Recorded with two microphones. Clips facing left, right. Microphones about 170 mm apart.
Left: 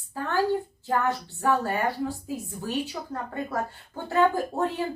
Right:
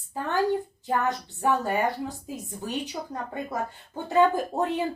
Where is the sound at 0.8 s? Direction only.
20° right (ahead or behind).